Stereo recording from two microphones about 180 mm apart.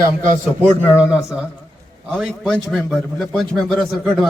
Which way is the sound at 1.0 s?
5° right (ahead or behind).